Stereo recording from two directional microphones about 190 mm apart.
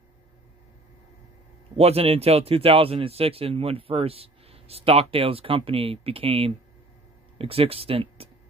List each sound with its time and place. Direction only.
1.8 s a man's voice: 30° right (ahead or behind)